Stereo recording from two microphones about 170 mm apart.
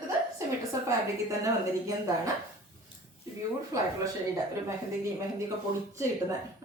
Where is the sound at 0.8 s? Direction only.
20° right (ahead or behind).